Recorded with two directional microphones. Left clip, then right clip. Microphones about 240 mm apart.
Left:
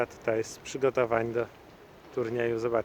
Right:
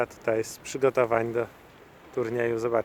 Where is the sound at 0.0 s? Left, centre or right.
Centre.